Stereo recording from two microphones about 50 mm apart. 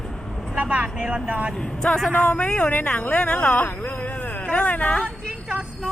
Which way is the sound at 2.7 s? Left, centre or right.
Left.